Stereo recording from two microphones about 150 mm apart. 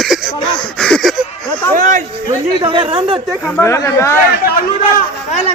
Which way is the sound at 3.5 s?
15° left (ahead or behind).